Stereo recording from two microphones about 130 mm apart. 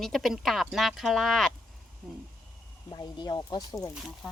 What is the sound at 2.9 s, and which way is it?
Speech, 35° left (ahead or behind).